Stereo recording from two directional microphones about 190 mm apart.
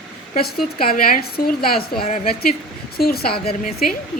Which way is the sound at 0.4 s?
55° left (ahead or behind).